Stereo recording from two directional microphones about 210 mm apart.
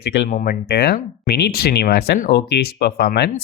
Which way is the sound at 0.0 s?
50° left (ahead or behind).